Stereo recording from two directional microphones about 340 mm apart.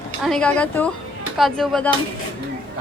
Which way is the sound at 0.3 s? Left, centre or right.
Centre.